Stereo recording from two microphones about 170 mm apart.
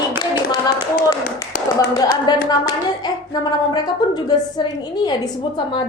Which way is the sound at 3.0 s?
25° left (ahead or behind).